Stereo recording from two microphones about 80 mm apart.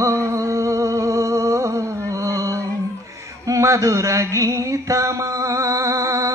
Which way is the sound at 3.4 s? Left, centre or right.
Right.